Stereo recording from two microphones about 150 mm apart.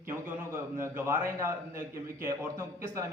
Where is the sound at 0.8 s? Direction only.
15° right (ahead or behind).